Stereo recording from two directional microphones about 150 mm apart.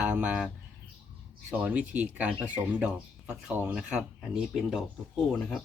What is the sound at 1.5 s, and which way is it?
Speech, 5° right (ahead or behind).